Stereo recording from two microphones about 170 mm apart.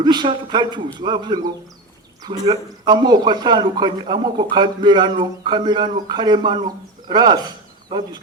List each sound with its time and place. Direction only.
0.0 s a man's voice: 25° right (ahead or behind)